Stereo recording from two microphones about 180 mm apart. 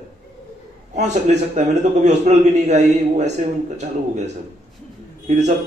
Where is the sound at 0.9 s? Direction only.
40° right (ahead or behind).